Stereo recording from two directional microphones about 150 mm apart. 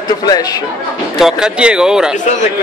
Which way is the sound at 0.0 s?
25° left (ahead or behind).